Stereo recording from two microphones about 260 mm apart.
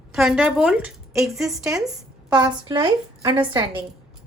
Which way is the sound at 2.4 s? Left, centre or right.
Centre.